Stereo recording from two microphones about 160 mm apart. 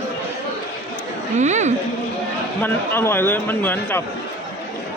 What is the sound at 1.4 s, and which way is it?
Speech, 45° right (ahead or behind).